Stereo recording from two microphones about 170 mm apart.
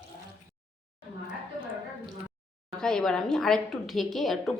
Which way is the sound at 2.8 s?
5° left (ahead or behind).